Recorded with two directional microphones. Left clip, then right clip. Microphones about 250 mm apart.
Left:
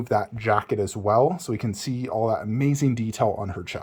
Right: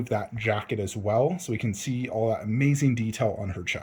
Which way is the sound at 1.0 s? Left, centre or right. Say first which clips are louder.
Left 4 dB; left.